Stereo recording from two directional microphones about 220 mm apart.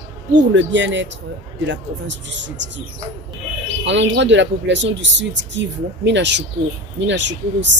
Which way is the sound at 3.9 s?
55° right (ahead or behind).